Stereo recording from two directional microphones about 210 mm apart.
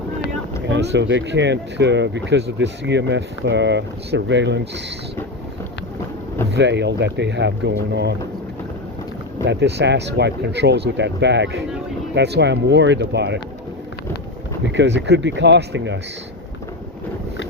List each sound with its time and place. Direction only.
0.7 s speech: 55° right (ahead or behind)
6.5 s speech: 55° right (ahead or behind)
9.5 s speech: 55° right (ahead or behind)
14.6 s speech: 60° right (ahead or behind)